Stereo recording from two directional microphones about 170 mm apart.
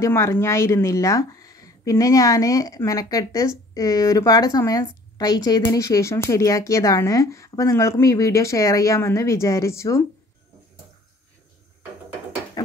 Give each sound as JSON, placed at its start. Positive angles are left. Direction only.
{"t": 0.0, "sound": "speech", "side_deg": 15}
{"t": 12.6, "sound": "ratchet", "side_deg": 20}